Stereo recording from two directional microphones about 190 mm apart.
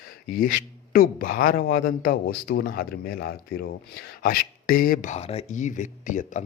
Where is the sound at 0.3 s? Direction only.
50° left (ahead or behind).